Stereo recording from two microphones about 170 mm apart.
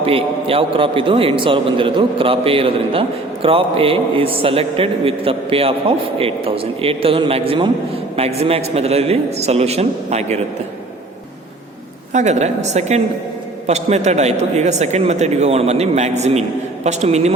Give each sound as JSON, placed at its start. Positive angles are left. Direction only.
{"t": 0.0, "sound": "a man's voice", "side_deg": -35}
{"t": 12.1, "sound": "a man's voice", "side_deg": -40}